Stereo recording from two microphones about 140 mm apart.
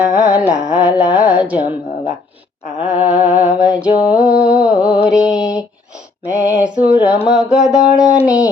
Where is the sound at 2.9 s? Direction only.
65° right (ahead or behind).